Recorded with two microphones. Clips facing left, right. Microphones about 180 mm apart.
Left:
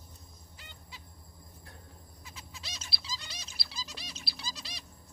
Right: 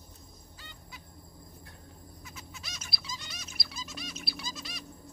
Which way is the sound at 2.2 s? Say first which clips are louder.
Even; 30° left (ahead or behind).